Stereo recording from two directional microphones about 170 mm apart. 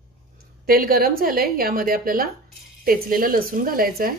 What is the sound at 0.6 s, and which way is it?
A woman's voice, 60° right (ahead or behind).